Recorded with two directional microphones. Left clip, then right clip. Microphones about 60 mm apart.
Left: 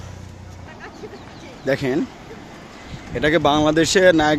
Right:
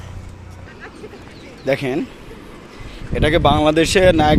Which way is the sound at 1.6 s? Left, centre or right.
Centre.